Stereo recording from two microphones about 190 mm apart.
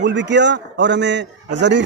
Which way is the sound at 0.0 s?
70° right (ahead or behind).